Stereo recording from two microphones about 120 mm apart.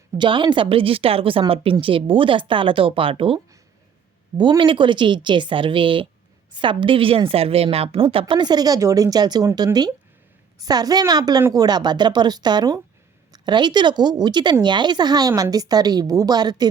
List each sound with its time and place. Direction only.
0.2 s a woman's voice: 40° right (ahead or behind)
10.6 s speech: 30° right (ahead or behind)